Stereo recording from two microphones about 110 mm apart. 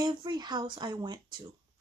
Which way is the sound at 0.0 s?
40° right (ahead or behind).